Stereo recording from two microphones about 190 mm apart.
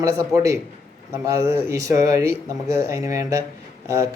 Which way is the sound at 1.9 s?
15° right (ahead or behind).